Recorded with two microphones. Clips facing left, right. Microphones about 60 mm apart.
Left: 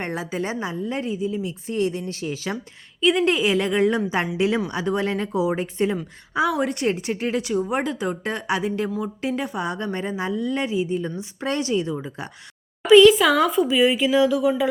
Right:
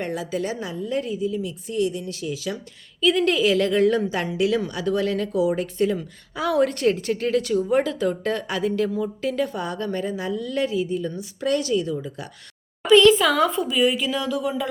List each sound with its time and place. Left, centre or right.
0.0 s a woman's voice: left
3.0 s a woman's voice: left
6.3 s a woman's voice: centre
12.9 s speech: centre
13.7 s a woman's voice: centre